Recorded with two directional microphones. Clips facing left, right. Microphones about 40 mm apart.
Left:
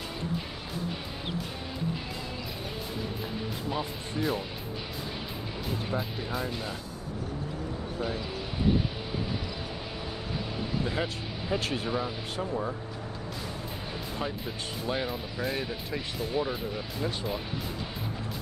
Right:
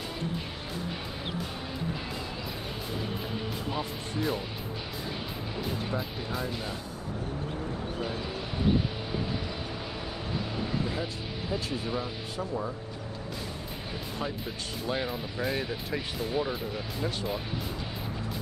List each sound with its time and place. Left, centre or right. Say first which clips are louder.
3.7 s speech: even; centre
5.9 s speech: left 1 dB; centre
11.6 s speech: left 2 dB; left
11.9 s speech: left 2 dB; centre
14.9 s speech: even; centre